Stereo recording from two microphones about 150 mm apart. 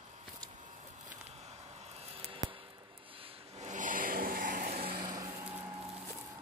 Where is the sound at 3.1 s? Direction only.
40° right (ahead or behind); by 4.7 s 65° right (ahead or behind).